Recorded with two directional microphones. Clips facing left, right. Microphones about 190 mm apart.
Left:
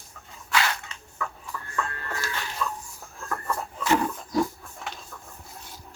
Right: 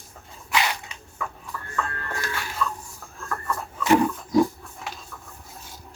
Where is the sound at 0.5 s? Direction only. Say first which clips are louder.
Right 1 dB; 15° right (ahead or behind).